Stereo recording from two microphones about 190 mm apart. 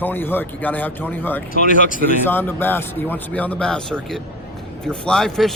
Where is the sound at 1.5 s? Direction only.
45° left (ahead or behind).